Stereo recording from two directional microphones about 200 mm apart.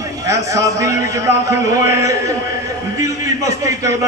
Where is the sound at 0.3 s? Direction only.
15° right (ahead or behind).